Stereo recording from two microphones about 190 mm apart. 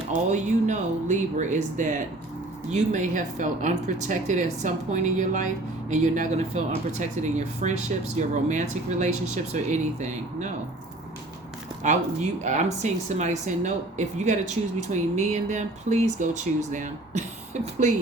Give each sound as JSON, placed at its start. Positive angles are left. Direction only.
{"t": 0.1, "sound": "speech", "side_deg": -40}
{"t": 11.8, "sound": "speech", "side_deg": -40}